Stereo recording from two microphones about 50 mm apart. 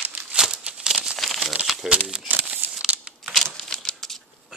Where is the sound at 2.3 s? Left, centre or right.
Right.